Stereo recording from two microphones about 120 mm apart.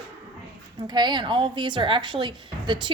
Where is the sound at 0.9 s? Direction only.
35° right (ahead or behind).